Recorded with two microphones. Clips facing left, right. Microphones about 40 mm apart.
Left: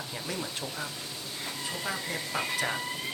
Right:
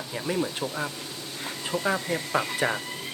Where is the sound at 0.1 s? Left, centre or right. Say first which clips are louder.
Right 10 dB; centre.